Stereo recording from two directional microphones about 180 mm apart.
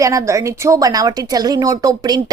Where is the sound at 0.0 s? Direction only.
20° right (ahead or behind).